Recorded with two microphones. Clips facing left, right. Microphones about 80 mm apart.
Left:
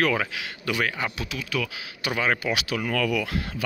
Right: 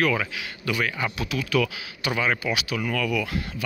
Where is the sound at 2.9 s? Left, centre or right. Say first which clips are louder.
Left 1 dB; left.